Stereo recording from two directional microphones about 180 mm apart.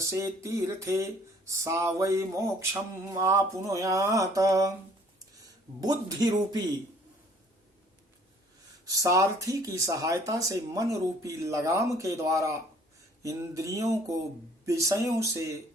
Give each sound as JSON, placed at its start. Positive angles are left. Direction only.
{"t": 0.0, "sound": "speech", "side_deg": -15}
{"t": 5.8, "sound": "speech", "side_deg": -20}
{"t": 9.0, "sound": "speech", "side_deg": -20}